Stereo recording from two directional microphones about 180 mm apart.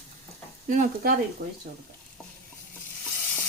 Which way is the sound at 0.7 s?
50° right (ahead or behind).